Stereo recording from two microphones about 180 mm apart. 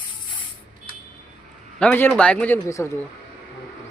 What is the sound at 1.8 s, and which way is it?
A man's voice, 10° left (ahead or behind).